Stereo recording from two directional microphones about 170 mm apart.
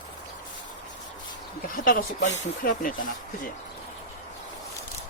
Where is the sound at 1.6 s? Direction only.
55° left (ahead or behind).